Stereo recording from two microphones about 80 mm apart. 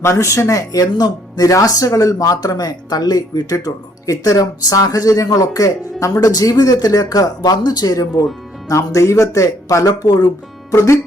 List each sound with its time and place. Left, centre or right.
0.0 s speech: left
3.5 s speech: left
9.8 s speech: left
10.7 s speech: left